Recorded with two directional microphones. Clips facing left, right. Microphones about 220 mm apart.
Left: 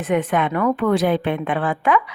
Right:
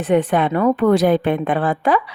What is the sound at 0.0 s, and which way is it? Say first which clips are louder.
A woman's voice: right 3 dB; 35° right (ahead or behind).